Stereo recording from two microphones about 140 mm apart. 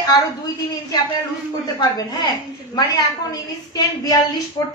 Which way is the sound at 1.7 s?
30° left (ahead or behind).